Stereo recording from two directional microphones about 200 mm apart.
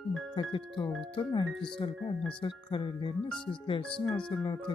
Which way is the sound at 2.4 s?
25° left (ahead or behind).